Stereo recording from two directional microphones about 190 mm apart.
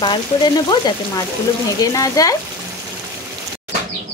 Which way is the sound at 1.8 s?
20° left (ahead or behind).